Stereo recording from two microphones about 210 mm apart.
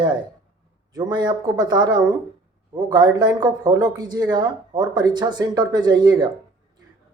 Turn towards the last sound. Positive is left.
turn(degrees=-20)  # may be behind; listen again after turning